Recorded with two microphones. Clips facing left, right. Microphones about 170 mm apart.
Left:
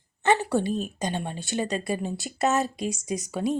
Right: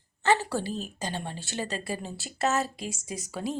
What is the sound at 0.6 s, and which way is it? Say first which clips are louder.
Speech: left 6 dB; 55° left (ahead or behind).